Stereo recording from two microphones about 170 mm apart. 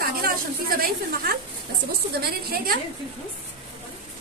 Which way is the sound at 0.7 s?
60° right (ahead or behind).